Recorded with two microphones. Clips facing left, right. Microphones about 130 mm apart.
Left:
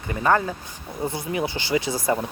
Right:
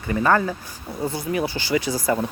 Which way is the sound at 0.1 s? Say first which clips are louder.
Right 2 dB; 20° left (ahead or behind).